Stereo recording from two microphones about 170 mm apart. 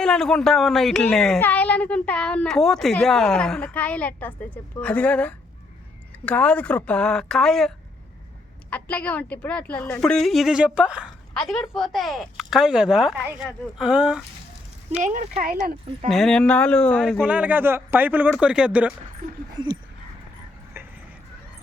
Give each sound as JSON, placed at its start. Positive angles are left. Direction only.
{"t": 0.0, "sound": "speech", "side_deg": 5}
{"t": 8.7, "sound": "speech", "side_deg": 10}
{"t": 15.0, "sound": "speech", "side_deg": -50}
{"t": 16.0, "sound": "speech", "side_deg": 0}
{"t": 17.2, "sound": "speech", "side_deg": -5}